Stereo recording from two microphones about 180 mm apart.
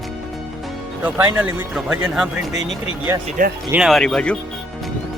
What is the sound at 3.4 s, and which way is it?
Speech, 45° right (ahead or behind).